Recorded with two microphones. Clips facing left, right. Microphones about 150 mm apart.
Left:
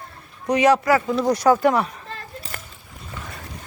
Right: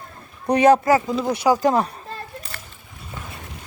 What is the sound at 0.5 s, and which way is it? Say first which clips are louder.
Speech: right 2 dB; 50° right (ahead or behind).